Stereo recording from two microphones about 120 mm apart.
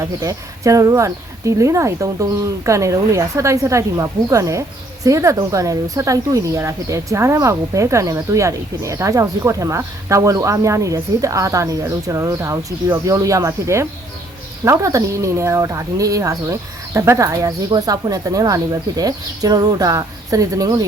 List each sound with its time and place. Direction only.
0.0 s speech: 30° right (ahead or behind)